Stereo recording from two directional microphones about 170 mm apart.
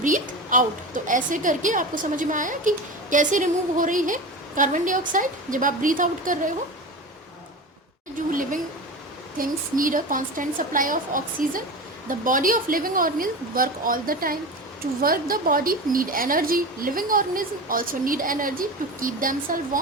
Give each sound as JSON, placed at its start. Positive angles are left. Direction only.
{"t": 0.0, "sound": "a woman's voice", "side_deg": -50}
{"t": 8.3, "sound": "a woman's voice", "side_deg": -50}